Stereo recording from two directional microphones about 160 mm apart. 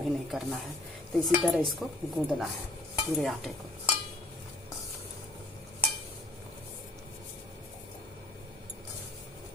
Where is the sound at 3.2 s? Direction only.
Centre (ahead or behind).